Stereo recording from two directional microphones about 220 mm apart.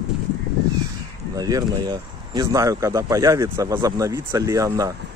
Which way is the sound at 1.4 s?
15° right (ahead or behind).